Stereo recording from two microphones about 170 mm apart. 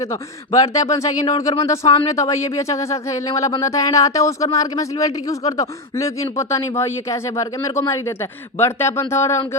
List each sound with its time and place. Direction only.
0.0 s speech: 20° left (ahead or behind)